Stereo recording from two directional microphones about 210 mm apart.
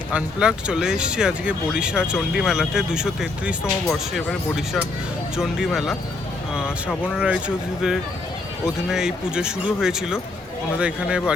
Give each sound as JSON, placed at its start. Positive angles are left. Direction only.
{"t": 0.1, "sound": "speech", "side_deg": -5}
{"t": 7.2, "sound": "speech", "side_deg": -5}